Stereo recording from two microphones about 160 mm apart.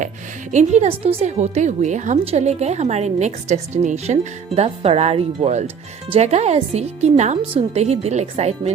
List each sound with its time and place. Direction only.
0.5 s a woman's voice: 45° right (ahead or behind)